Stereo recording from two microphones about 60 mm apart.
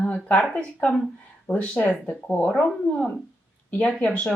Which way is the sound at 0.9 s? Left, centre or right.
Centre.